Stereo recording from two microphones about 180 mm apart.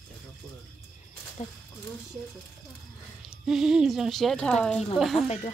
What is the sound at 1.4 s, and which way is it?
Speech, 40° left (ahead or behind).